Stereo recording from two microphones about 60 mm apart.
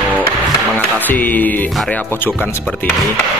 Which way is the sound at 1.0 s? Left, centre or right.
Left.